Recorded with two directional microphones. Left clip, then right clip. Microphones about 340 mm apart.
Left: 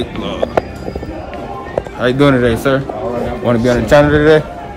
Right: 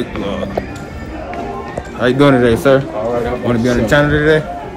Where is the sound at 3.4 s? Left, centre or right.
Centre.